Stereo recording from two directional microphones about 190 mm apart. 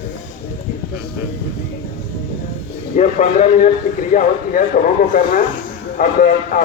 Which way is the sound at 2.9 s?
40° left (ahead or behind).